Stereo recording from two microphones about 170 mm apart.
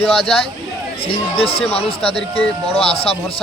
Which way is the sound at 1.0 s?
35° left (ahead or behind).